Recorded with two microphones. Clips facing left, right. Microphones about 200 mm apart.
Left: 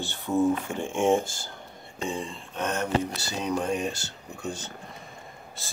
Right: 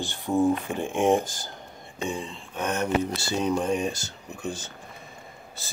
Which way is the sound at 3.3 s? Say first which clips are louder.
Right 3 dB; 25° right (ahead or behind).